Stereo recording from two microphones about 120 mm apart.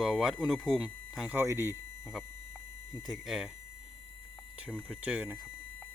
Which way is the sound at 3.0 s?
Centre (ahead or behind).